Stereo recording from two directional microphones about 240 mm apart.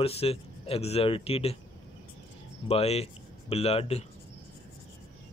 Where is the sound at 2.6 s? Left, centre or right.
Left.